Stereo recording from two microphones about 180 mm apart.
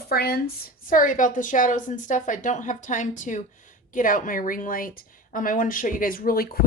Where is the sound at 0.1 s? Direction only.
60° left (ahead or behind).